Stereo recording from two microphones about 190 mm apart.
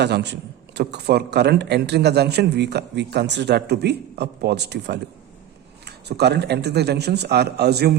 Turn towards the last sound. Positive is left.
turn(degrees=-60)  # may be behind; listen again after turning